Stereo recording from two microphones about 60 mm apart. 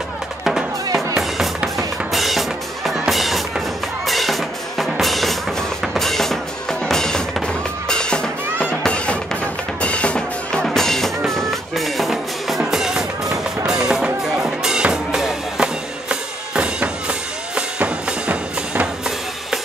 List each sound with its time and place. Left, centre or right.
0.4 s music: centre
5.9 s drum kit: centre
6.9 s music: centre
9.8 s drum: centre
10.6 s music: centre; by 18.9 s right